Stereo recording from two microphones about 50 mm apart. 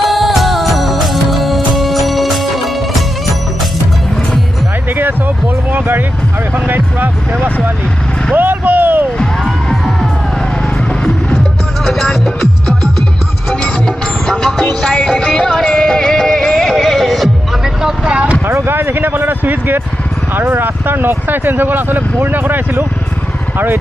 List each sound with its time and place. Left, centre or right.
0.0 s music: centre
6.5 s music: right
8.4 s vehicle: right
9.2 s music: centre
11.8 s music: centre
13.5 s music: centre
17.8 s vehicle: centre
18.5 s a sound: right
20.3 s speech: right